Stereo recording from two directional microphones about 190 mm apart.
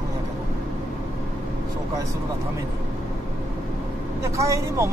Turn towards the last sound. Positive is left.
turn(degrees=-15)  # may be behind; listen again after turning